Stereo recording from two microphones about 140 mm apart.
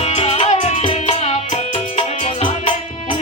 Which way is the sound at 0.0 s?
45° left (ahead or behind).